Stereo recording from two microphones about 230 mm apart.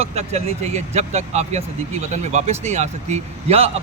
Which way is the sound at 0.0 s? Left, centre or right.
Right.